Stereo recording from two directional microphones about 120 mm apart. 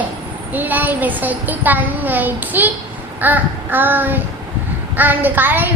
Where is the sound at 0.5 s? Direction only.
15° right (ahead or behind).